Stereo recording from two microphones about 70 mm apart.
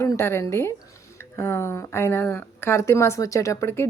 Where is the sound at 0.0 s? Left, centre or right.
Left.